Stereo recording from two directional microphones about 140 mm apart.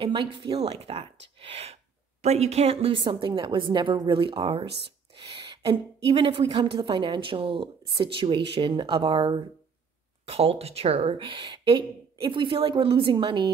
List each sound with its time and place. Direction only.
0.0 s a woman's voice: 35° right (ahead or behind)
0.7 s a woman's voice: 45° right (ahead or behind); by 13.5 s 30° right (ahead or behind)